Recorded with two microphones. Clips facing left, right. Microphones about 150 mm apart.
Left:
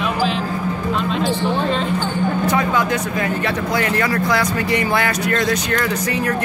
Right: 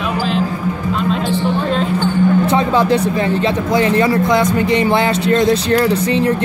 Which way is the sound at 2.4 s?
30° right (ahead or behind).